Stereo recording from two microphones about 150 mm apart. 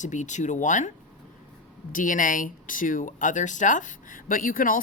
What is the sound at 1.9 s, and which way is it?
Speech, 65° left (ahead or behind).